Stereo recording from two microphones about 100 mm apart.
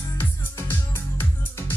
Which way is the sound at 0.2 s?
25° left (ahead or behind).